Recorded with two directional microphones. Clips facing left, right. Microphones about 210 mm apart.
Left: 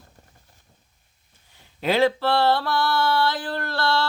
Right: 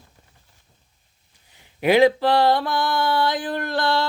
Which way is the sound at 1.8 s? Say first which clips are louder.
Right 4 dB; 15° right (ahead or behind).